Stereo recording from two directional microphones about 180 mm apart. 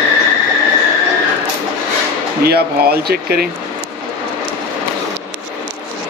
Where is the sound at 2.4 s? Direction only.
60° right (ahead or behind).